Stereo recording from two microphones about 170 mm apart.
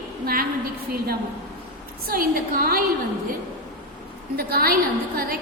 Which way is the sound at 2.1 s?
60° right (ahead or behind).